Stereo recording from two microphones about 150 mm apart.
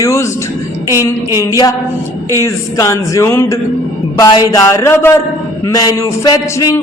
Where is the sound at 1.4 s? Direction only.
25° left (ahead or behind).